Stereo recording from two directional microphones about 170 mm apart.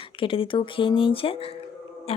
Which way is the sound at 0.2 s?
30° left (ahead or behind).